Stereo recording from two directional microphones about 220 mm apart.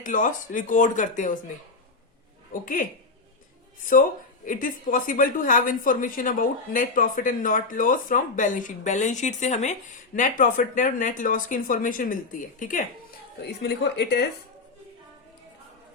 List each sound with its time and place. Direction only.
0.0 s a woman's voice: 35° left (ahead or behind)
2.5 s a woman's voice: 40° left (ahead or behind)
4.4 s a woman's voice: 40° left (ahead or behind)
13.6 s a woman's voice: 50° left (ahead or behind)